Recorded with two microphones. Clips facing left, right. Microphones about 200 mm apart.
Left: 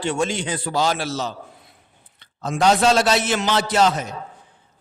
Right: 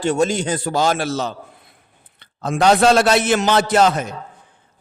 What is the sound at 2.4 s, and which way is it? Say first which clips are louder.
A man's voice: right 3 dB; 60° right (ahead or behind).